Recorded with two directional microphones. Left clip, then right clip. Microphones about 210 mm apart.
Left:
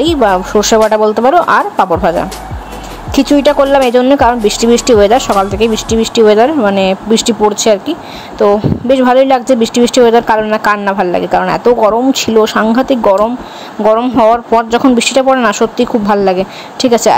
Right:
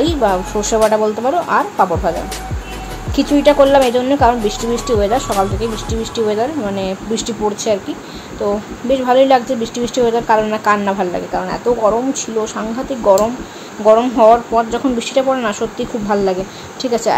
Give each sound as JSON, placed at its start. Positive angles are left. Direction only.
{"t": 0.1, "sound": "speech", "side_deg": 35}
{"t": 3.2, "sound": "speech", "side_deg": 30}